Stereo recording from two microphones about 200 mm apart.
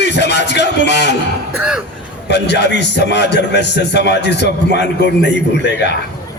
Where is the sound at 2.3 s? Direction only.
55° left (ahead or behind).